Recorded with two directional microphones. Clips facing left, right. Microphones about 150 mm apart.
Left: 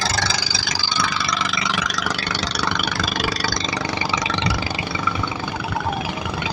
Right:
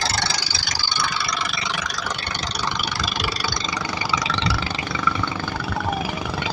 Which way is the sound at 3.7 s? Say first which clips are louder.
Left 2 dB; 20° left (ahead or behind).